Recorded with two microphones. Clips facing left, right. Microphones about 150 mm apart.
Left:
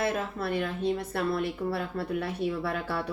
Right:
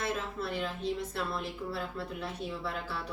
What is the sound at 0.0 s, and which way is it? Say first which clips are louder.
Speech: left 5 dB; 60° left (ahead or behind).